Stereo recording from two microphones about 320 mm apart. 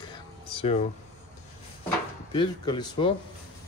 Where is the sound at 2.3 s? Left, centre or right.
Centre.